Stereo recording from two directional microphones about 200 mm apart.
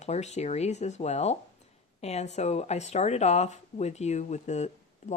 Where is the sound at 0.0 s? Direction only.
35° left (ahead or behind).